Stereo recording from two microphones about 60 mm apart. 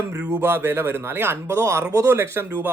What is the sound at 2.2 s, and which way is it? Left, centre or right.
Speech, right.